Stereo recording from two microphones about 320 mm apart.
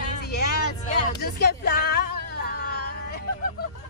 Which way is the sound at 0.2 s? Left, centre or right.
Left.